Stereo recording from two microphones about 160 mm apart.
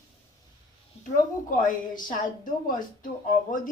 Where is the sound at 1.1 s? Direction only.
55° left (ahead or behind).